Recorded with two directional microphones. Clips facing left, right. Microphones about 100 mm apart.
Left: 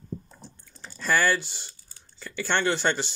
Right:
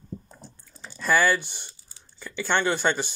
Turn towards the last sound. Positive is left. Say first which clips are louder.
# right 1 dB
turn(degrees=-10)  # may be behind; listen again after turning